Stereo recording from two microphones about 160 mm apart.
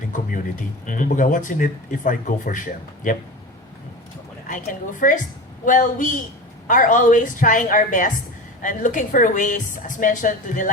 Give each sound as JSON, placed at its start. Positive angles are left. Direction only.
{"t": 0.1, "sound": "a sound", "side_deg": 55}
{"t": 0.9, "sound": "speech", "side_deg": 55}
{"t": 4.4, "sound": "a woman's voice", "side_deg": 55}